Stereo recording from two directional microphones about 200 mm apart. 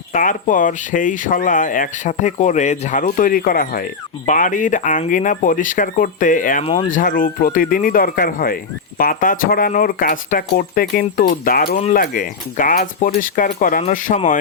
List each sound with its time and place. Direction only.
0.1 s speech: 40° left (ahead or behind)